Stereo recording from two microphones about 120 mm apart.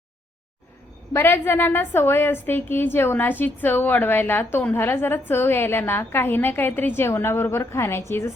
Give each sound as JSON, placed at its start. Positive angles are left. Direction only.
{"t": 1.1, "sound": "a woman's voice", "side_deg": 20}